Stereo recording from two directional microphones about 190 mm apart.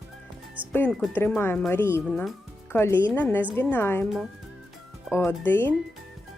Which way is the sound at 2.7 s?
10° left (ahead or behind).